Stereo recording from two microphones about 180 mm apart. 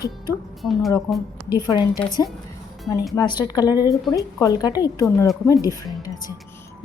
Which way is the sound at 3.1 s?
20° left (ahead or behind).